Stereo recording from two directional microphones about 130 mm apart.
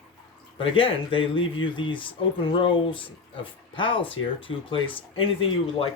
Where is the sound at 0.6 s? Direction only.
40° left (ahead or behind).